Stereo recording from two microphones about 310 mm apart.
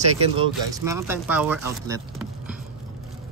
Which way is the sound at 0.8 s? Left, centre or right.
Centre.